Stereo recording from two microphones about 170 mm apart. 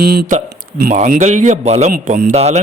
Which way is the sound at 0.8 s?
50° right (ahead or behind).